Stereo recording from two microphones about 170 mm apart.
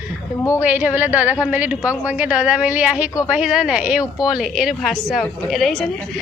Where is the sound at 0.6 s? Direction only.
10° right (ahead or behind).